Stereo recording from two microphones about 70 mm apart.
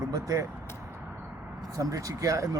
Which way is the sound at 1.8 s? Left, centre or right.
Right.